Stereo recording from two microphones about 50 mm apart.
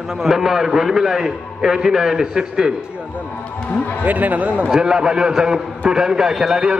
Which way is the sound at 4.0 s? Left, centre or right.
Right.